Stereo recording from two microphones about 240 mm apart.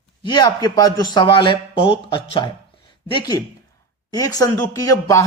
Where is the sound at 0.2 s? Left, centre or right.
Centre.